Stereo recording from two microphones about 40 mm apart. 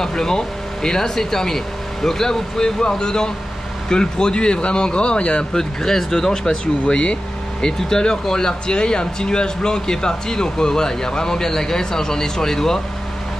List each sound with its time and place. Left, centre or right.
0.0 s speech: centre